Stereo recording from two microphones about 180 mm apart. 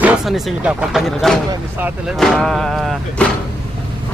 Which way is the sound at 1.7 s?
10° right (ahead or behind).